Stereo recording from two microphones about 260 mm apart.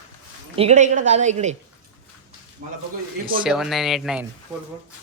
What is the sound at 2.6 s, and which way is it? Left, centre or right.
Speech, right.